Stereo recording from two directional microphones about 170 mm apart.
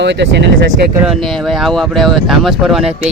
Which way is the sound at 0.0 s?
90° right.